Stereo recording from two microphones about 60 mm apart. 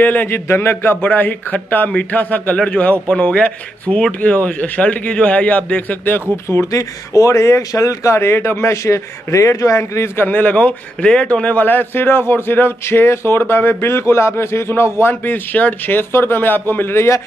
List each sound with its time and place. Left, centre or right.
0.0 s a man's voice: left
0.3 s speech: left
1.0 s a man's voice: left
6.3 s speech: left
6.7 s speech: left
10.2 s a man's voice: left
11.6 s speech: left
16.1 s speech: left